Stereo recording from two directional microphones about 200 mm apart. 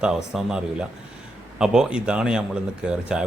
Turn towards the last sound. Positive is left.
turn(degrees=-5)  # may be behind; listen again after turning